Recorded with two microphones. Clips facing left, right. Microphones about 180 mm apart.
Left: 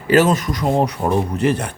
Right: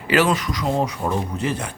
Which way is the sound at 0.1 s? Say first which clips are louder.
Left 4 dB; 45° left (ahead or behind).